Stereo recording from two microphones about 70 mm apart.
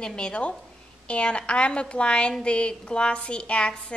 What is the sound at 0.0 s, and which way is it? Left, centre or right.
A woman's voice, centre.